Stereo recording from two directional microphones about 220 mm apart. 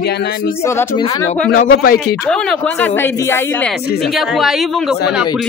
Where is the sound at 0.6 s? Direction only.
15° left (ahead or behind).